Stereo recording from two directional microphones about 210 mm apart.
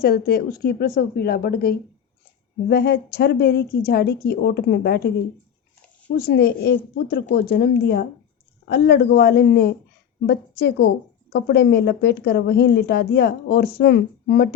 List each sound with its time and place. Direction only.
0.0 s a woman's voice: 45° left (ahead or behind)
6.1 s a woman's voice: 50° left (ahead or behind)